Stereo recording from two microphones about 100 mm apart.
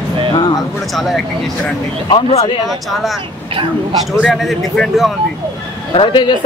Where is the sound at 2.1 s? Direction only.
75° left (ahead or behind).